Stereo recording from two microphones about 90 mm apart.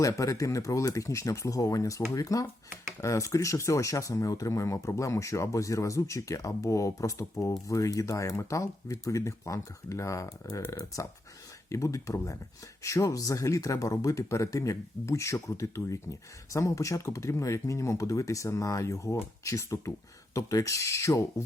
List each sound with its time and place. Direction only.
0.0 s speech: 40° left (ahead or behind)